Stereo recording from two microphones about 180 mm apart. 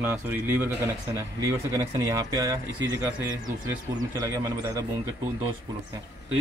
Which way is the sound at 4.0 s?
20° right (ahead or behind).